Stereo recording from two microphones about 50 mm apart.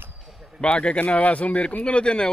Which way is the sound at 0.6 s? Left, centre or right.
Left.